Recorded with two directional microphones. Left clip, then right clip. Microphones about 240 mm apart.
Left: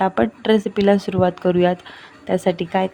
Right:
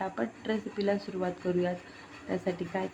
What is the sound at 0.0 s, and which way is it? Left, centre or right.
Speech, left.